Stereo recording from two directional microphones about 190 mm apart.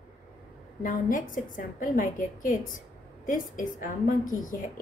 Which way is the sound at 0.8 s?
45° left (ahead or behind).